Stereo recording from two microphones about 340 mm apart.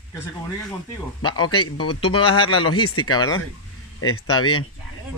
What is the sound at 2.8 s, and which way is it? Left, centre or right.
Speech, left.